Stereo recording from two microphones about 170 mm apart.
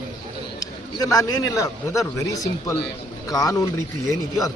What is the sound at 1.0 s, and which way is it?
A man's voice, 20° left (ahead or behind).